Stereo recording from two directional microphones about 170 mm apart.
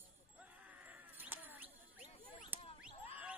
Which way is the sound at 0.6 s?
10° right (ahead or behind).